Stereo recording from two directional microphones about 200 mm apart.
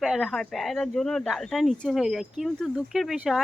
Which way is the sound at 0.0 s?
Centre (ahead or behind).